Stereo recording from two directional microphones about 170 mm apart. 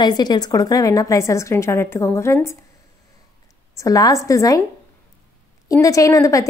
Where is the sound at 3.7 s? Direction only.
20° left (ahead or behind).